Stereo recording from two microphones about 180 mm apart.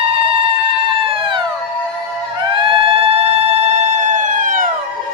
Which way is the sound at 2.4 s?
30° right (ahead or behind).